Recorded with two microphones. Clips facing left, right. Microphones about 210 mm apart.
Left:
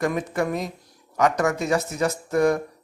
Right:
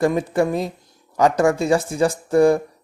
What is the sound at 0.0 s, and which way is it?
Speech, 30° right (ahead or behind).